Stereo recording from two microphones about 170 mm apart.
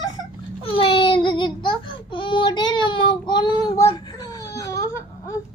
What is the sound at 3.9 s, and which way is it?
Wail, 25° left (ahead or behind).